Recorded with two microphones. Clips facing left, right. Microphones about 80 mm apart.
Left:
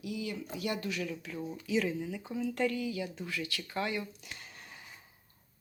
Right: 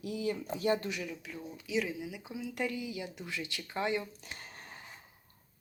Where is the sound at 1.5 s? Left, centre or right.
Centre; by 4.1 s right.